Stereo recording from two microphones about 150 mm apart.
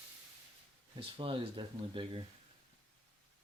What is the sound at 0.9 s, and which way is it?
Speech, 35° right (ahead or behind).